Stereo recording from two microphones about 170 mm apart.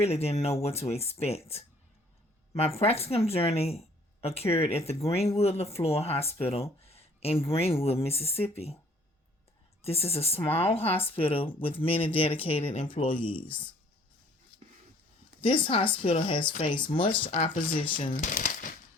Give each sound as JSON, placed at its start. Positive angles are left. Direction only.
{"t": 0.0, "sound": "speech", "side_deg": 35}
{"t": 9.8, "sound": "speech", "side_deg": 35}
{"t": 15.4, "sound": "speech", "side_deg": 30}
{"t": 17.2, "sound": "speech", "side_deg": 45}